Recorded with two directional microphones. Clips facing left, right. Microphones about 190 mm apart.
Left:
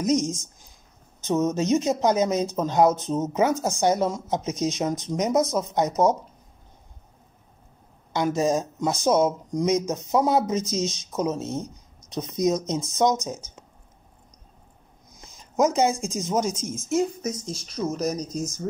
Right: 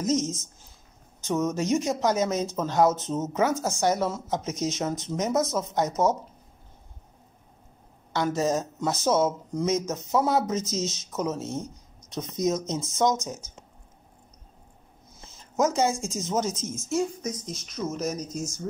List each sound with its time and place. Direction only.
0.0 s speech: 15° left (ahead or behind)
8.1 s speech: 15° left (ahead or behind)
15.1 s a woman's voice: 15° left (ahead or behind)
17.2 s a woman's voice: 25° left (ahead or behind)